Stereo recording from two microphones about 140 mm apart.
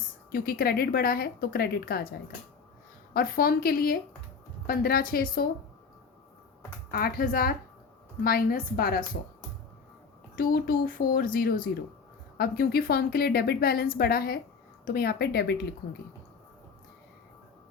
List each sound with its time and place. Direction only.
0.3 s a woman's voice: 90° left
3.1 s a woman's voice: 90° left
6.9 s a woman's voice: 90° left
10.3 s a woman's voice: 90° left